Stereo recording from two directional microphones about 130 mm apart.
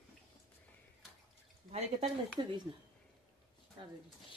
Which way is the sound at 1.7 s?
55° right (ahead or behind).